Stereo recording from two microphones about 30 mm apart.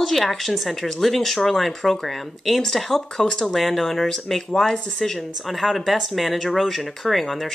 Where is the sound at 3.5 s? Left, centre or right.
Centre.